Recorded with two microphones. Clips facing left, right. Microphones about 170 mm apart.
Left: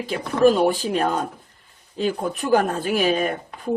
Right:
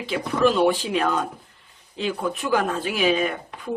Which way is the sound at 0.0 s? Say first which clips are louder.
Left 3 dB; 45° left (ahead or behind).